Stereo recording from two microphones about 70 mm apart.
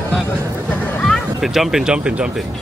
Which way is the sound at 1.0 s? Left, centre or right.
Centre.